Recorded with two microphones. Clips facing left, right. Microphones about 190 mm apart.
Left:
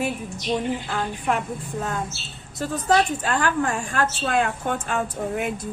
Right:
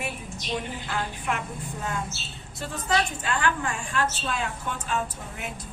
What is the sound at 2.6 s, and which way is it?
A woman's voice, 45° left (ahead or behind).